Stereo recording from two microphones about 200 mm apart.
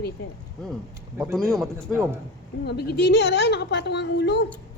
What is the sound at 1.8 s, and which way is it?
Speech, 15° right (ahead or behind).